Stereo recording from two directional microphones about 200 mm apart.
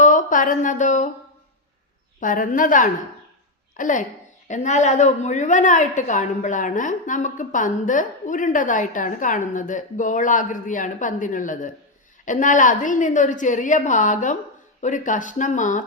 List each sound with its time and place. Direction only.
0.0 s speech: 40° left (ahead or behind)
2.2 s a woman's voice: 40° left (ahead or behind)